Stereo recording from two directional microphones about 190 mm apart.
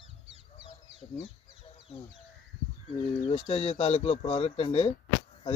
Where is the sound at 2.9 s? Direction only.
30° left (ahead or behind).